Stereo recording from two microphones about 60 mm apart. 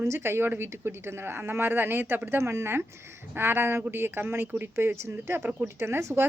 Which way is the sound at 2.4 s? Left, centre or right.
Right.